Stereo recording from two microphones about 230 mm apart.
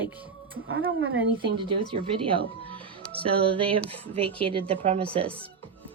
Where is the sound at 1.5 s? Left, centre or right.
Right.